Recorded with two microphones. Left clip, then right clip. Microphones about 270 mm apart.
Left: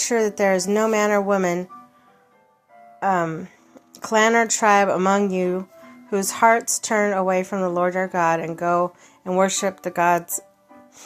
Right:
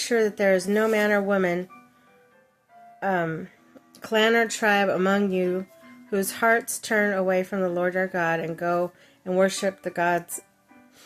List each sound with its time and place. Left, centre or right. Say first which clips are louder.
0.2 s a woman's voice: left 1 dB; centre
3.0 s a woman's voice: left 4 dB; centre